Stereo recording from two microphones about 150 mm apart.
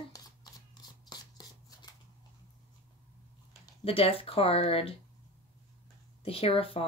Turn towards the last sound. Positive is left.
turn(degrees=40)  # may be behind; listen again after turning